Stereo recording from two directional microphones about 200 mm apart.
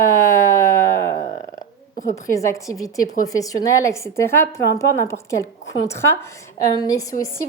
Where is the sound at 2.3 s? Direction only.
15° left (ahead or behind).